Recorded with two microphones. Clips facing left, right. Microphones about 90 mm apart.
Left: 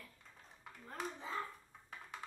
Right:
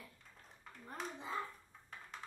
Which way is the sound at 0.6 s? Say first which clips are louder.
Left 1 dB; 5° left (ahead or behind).